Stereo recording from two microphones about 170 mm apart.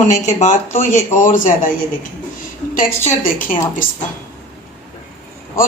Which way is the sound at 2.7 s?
45° left (ahead or behind).